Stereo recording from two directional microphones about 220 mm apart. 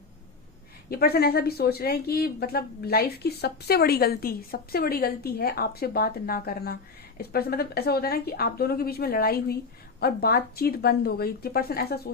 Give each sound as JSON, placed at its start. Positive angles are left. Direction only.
{"t": 0.9, "sound": "speech", "side_deg": 45}